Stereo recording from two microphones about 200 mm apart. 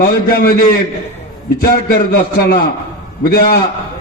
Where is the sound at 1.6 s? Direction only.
50° left (ahead or behind).